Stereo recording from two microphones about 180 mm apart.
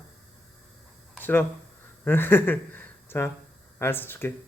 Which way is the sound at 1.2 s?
10° left (ahead or behind).